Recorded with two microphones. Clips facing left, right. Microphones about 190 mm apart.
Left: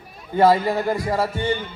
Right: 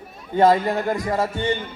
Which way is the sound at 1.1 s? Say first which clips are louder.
Even; 20° right (ahead or behind).